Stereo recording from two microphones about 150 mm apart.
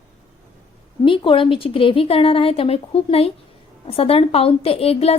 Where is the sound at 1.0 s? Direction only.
35° left (ahead or behind).